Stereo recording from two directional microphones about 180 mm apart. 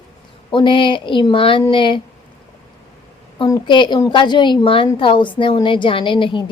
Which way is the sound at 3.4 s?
25° left (ahead or behind).